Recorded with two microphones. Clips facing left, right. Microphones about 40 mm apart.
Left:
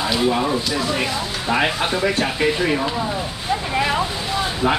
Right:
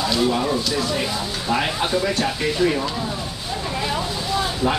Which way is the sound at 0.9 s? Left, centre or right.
Left.